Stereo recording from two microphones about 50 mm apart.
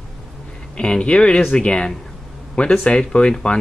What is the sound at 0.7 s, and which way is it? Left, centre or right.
Speech, centre.